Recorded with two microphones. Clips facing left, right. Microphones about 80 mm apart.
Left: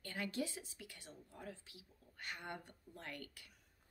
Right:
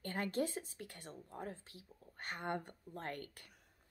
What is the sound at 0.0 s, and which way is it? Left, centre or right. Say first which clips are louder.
A woman's voice: right 5 dB; right.